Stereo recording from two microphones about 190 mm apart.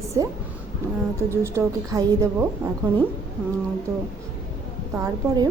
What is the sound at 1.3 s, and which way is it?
A woman's voice, 15° right (ahead or behind).